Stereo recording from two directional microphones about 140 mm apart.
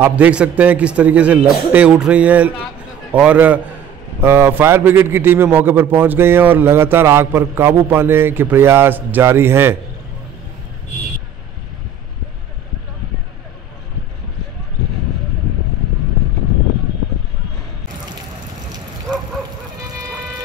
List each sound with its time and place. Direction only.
0.0 s a man's voice: 10° right (ahead or behind)